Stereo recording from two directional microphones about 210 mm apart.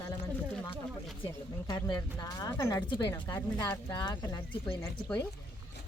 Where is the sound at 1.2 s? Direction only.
15° left (ahead or behind).